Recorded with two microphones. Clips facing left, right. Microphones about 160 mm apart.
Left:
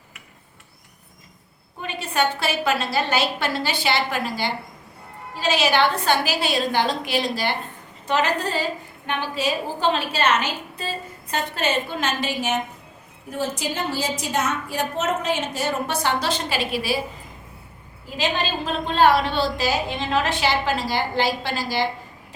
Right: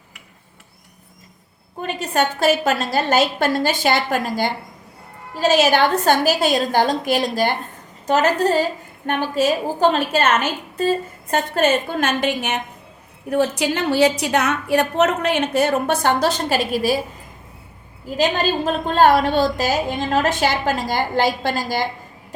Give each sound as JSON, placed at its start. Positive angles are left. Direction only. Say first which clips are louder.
{"t": 1.8, "sound": "a woman's voice", "louder": "right 3 dB", "side_deg": -45}
{"t": 18.2, "sound": "a woman's voice", "louder": "right 6 dB", "side_deg": -45}